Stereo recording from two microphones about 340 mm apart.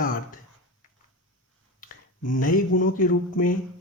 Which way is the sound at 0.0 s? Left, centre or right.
Left.